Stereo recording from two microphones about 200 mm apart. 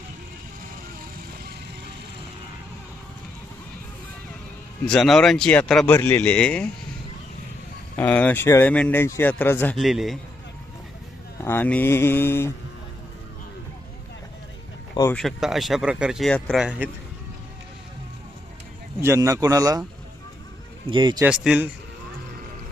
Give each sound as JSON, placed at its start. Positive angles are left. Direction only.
{"t": 4.9, "sound": "speech", "side_deg": 0}
{"t": 7.9, "sound": "speech", "side_deg": 10}
{"t": 9.7, "sound": "speech", "side_deg": 0}
{"t": 11.4, "sound": "speech", "side_deg": 10}
{"t": 15.1, "sound": "speech", "side_deg": 0}
{"t": 19.0, "sound": "speech", "side_deg": -15}
{"t": 20.9, "sound": "speech", "side_deg": -20}
{"t": 21.2, "sound": "speech", "side_deg": -5}